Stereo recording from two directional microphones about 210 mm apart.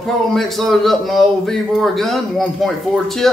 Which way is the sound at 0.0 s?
Centre (ahead or behind).